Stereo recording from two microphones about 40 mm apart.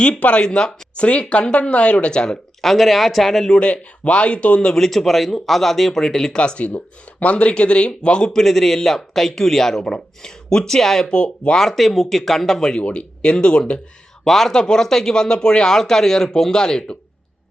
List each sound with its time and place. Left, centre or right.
0.0 s speech: left
0.4 s speech: centre
2.6 s speech: centre
3.5 s speech: left
4.7 s speech: centre
6.3 s speech: left
6.7 s speech: left
8.3 s speech: centre
11.0 s speech: left
11.6 s speech: centre
12.8 s speech: left
14.3 s speech: centre